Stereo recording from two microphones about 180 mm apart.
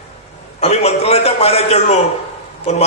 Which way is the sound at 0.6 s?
35° left (ahead or behind).